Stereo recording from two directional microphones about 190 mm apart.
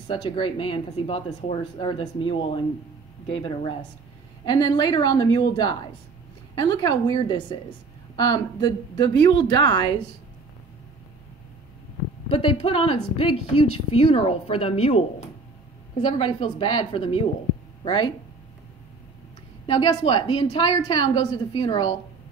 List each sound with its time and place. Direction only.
0.1 s a woman's voice: 25° left (ahead or behind)
12.3 s a woman's voice: 30° left (ahead or behind)
19.6 s a woman's voice: 25° left (ahead or behind)